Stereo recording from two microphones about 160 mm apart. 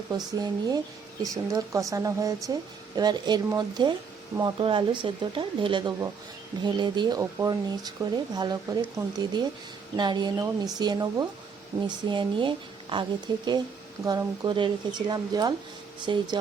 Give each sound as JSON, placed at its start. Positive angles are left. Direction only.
{"t": 0.1, "sound": "a woman's voice", "side_deg": -25}
{"t": 9.9, "sound": "a woman's voice", "side_deg": -25}